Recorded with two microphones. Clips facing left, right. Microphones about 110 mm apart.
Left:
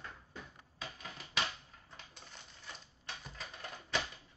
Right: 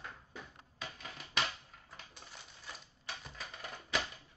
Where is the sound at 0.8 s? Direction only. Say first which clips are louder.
Even; centre (ahead or behind).